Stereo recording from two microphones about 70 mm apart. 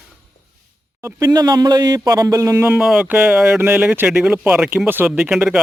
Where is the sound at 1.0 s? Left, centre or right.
Right.